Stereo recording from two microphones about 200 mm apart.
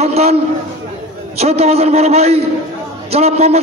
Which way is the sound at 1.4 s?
30° right (ahead or behind).